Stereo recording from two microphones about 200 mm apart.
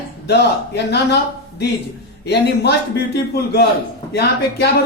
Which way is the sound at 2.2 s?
55° left (ahead or behind).